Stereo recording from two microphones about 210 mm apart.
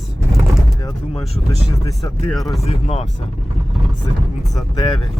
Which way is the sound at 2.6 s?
30° left (ahead or behind).